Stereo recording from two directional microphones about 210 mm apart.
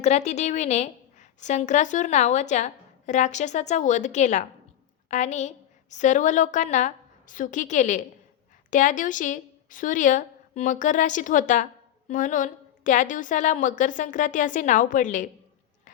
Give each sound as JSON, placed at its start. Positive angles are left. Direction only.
{"t": 0.0, "sound": "a woman's voice", "side_deg": 35}